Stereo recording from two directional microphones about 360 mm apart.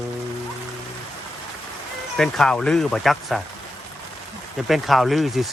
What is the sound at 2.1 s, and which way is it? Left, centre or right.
Speech, centre.